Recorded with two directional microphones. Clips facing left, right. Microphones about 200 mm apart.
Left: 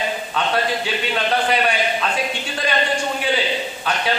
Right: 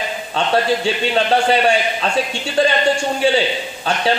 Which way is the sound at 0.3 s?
30° right (ahead or behind).